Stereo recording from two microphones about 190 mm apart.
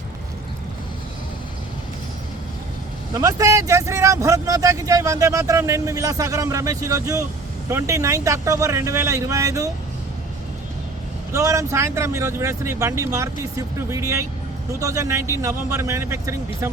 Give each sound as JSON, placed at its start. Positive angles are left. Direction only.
{"t": 3.2, "sound": "speech", "side_deg": -20}
{"t": 11.3, "sound": "speech", "side_deg": -15}